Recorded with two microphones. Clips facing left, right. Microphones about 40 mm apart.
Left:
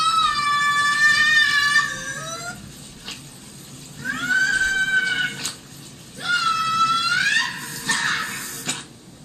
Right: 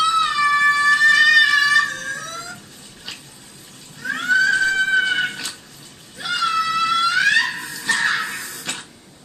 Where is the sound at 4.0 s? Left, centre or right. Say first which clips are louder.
Right 3 dB; right.